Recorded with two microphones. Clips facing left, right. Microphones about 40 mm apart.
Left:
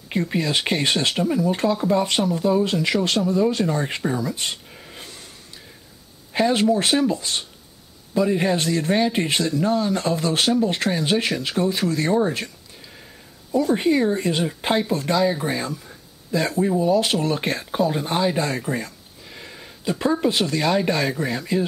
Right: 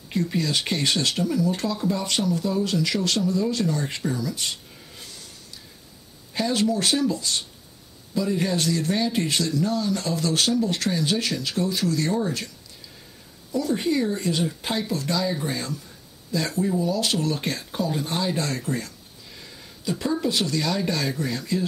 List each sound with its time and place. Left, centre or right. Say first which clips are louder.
0.1 s speech: left 2 dB; left
6.3 s speech: left 5 dB; left
13.5 s speech: left 5 dB; left